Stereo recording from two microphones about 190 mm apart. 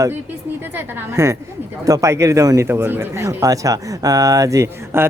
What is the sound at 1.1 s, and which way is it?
Speech, 15° right (ahead or behind).